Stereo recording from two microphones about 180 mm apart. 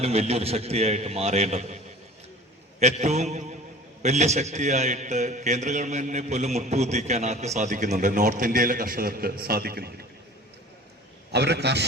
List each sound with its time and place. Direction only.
0.0 s a man's voice: 35° right (ahead or behind)
2.8 s a man's voice: 40° right (ahead or behind); by 9.9 s 60° right (ahead or behind)
11.3 s a man's voice: 65° right (ahead or behind)